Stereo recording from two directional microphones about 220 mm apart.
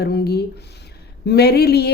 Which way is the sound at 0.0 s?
45° left (ahead or behind).